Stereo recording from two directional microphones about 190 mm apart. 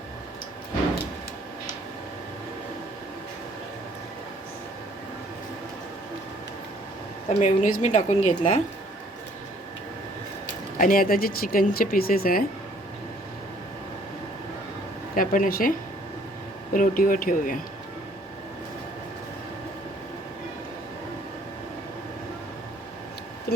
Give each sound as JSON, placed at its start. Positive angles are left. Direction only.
{"t": 7.3, "sound": "a woman's voice", "side_deg": 40}
{"t": 10.8, "sound": "speech", "side_deg": 50}
{"t": 15.1, "sound": "speech", "side_deg": 45}
{"t": 16.7, "sound": "speech", "side_deg": 45}